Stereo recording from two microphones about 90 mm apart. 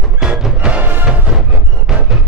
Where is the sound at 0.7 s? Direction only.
20° right (ahead or behind).